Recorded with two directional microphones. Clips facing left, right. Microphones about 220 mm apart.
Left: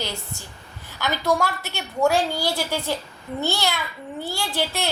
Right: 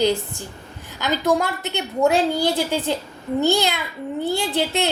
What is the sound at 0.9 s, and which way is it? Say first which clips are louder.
A woman's voice: right 3 dB; 20° right (ahead or behind).